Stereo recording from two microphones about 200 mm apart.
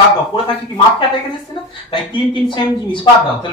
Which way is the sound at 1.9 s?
25° left (ahead or behind).